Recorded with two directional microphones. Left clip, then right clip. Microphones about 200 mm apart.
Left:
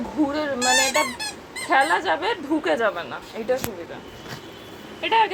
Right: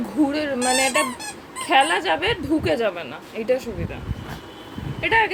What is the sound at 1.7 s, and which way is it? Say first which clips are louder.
Speech: right 1 dB; 25° right (ahead or behind).